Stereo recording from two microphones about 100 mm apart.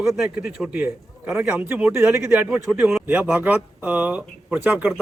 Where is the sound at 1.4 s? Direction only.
15° right (ahead or behind).